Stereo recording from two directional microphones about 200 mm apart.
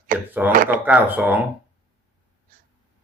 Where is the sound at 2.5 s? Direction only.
45° right (ahead or behind).